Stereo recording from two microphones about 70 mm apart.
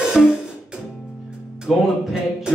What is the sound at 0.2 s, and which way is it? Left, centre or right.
Music, centre.